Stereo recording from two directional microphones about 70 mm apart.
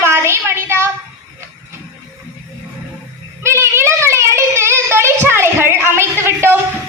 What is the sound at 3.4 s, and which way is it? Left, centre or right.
Child singing, right.